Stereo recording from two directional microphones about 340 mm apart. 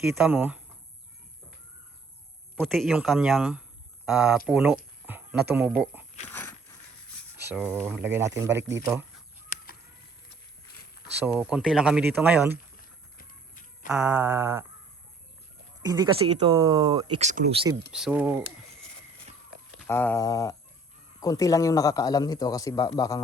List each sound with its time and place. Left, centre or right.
0.0 s speech: centre
2.6 s speech: centre
7.3 s speech: centre
11.3 s speech: centre
12.7 s clip-clop: left
13.8 s speech: centre
15.8 s speech: centre
17.9 s speech: centre
19.8 s a man's voice: centre